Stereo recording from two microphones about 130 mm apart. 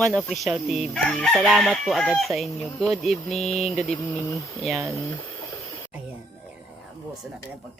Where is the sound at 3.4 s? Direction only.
55° left (ahead or behind).